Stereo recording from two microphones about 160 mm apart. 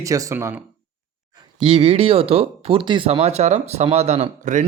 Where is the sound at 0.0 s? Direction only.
20° right (ahead or behind).